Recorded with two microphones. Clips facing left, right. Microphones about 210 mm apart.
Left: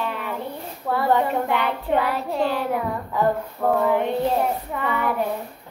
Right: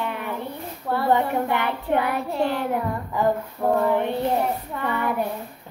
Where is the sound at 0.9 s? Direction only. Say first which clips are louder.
Left 1 dB; centre (ahead or behind).